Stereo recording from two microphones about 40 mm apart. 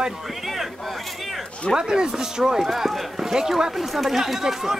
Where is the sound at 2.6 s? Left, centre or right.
Centre.